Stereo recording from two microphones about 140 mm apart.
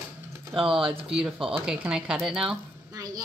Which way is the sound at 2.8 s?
25° right (ahead or behind).